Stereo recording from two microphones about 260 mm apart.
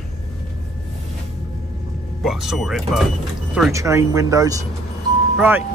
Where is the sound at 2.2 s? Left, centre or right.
Centre.